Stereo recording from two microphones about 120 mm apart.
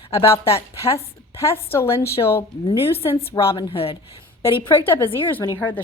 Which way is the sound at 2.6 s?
50° left (ahead or behind).